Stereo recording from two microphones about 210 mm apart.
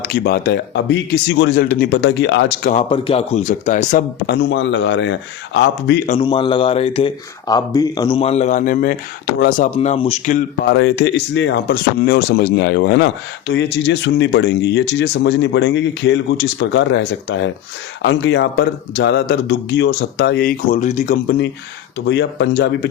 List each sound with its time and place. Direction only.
0.1 s speech: 45° left (ahead or behind)
2.9 s speech: 25° left (ahead or behind)
4.4 s speech: 55° left (ahead or behind)
6.1 s speech: 25° left (ahead or behind)
10.3 s speech: 50° left (ahead or behind)
22.0 s speech: 55° left (ahead or behind)